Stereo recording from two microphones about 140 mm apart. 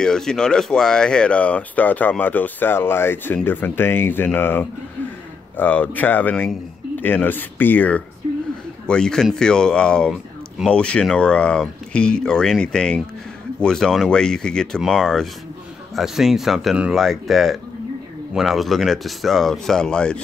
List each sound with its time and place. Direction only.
0.0 s speech: 5° left (ahead or behind)